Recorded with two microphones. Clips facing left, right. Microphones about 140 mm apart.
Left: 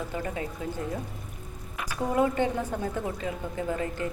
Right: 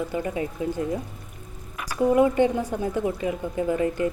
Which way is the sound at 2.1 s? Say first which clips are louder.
Right 4 dB; 20° right (ahead or behind).